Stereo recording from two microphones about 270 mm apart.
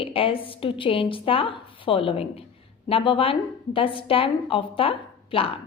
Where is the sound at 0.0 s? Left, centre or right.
Centre.